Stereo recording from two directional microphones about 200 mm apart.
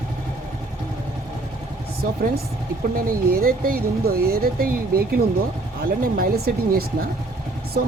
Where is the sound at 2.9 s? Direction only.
45° right (ahead or behind).